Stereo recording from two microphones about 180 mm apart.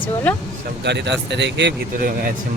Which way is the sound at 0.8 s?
70° right (ahead or behind).